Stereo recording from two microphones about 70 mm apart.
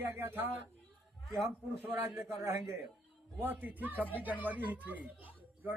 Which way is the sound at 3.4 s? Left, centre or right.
Right.